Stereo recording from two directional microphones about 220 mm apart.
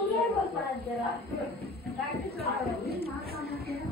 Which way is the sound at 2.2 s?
45° left (ahead or behind).